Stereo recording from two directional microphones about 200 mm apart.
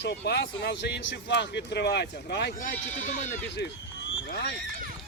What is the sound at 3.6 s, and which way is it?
Speech, 55° left (ahead or behind).